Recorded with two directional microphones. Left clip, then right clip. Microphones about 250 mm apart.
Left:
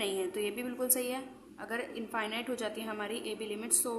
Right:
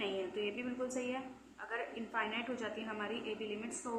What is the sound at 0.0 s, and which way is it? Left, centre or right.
A woman's voice, left.